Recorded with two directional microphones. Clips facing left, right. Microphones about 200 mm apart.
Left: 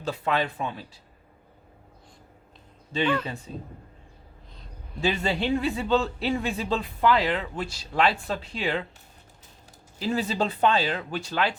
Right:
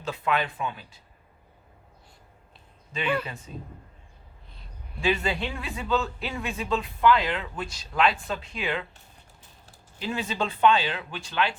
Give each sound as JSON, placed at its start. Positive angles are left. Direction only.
{"t": 0.0, "sound": "a man's voice", "side_deg": 35}
{"t": 3.5, "sound": "a man's voice", "side_deg": 35}
{"t": 4.9, "sound": "a man's voice", "side_deg": 35}
{"t": 10.0, "sound": "a man's voice", "side_deg": 35}